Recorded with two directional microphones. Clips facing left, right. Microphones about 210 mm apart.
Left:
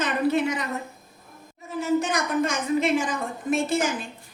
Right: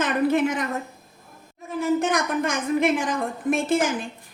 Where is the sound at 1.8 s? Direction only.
55° right (ahead or behind).